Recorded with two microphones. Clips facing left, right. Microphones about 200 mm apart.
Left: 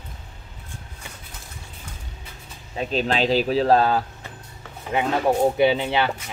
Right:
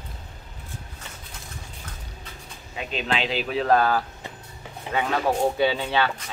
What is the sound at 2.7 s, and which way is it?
Speech, 40° left (ahead or behind).